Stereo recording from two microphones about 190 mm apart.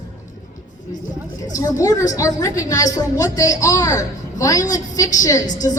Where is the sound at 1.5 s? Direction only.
20° left (ahead or behind).